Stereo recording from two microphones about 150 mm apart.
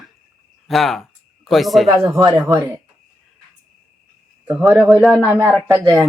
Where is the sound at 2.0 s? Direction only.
25° right (ahead or behind).